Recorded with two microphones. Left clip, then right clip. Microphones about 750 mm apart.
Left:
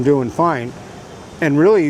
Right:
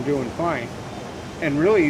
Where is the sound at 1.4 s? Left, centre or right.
Left.